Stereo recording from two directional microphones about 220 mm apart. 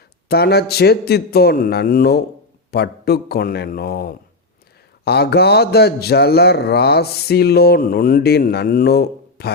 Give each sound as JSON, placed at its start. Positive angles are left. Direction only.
{"t": 0.3, "sound": "speech", "side_deg": 45}